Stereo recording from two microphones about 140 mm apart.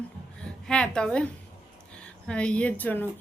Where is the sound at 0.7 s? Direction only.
5° left (ahead or behind).